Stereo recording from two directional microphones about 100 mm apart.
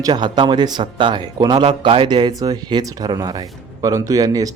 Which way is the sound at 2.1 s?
45° right (ahead or behind).